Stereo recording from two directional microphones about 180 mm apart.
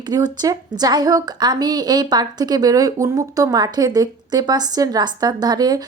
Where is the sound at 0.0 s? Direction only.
20° right (ahead or behind).